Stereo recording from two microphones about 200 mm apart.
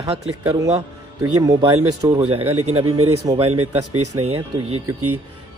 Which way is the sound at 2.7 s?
90° right.